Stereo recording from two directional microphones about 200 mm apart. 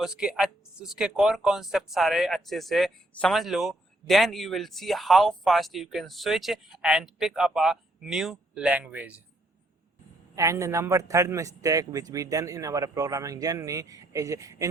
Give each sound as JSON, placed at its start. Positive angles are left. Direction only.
{"t": 0.0, "sound": "speech", "side_deg": -5}
{"t": 10.3, "sound": "a man's voice", "side_deg": -15}